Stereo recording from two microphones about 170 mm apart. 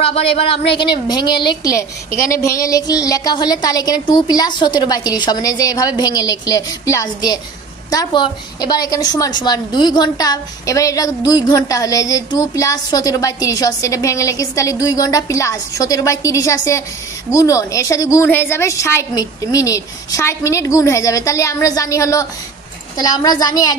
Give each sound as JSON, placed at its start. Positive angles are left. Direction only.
{"t": 0.0, "sound": "a woman's voice", "side_deg": 35}